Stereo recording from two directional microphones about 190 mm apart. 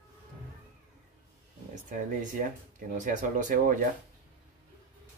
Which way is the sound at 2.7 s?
40° right (ahead or behind).